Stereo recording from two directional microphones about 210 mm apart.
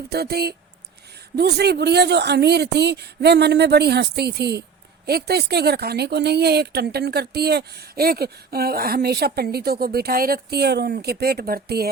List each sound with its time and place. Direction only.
0.1 s speech: 50° right (ahead or behind)